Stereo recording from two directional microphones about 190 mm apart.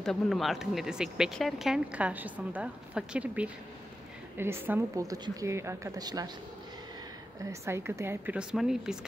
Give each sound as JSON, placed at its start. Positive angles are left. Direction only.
{"t": 0.0, "sound": "a woman's voice", "side_deg": 0}
{"t": 7.6, "sound": "a woman's voice", "side_deg": -15}